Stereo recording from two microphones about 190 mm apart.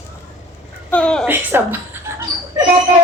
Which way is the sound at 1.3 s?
10° right (ahead or behind).